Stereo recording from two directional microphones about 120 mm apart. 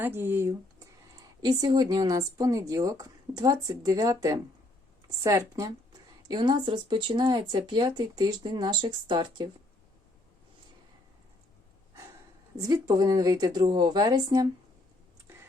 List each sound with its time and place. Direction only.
0.0 s speech: 20° right (ahead or behind)
1.4 s a woman's voice: 35° right (ahead or behind)
12.5 s speech: 35° right (ahead or behind)